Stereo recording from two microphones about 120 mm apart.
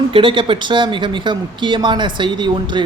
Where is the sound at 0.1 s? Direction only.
45° right (ahead or behind).